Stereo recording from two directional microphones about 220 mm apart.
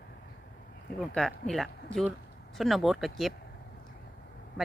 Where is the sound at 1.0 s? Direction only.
Centre (ahead or behind).